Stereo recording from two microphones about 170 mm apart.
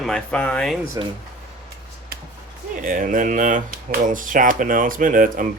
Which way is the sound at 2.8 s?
55° right (ahead or behind).